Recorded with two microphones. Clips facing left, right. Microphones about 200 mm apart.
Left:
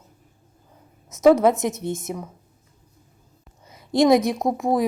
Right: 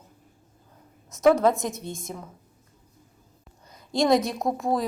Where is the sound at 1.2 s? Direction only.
20° left (ahead or behind).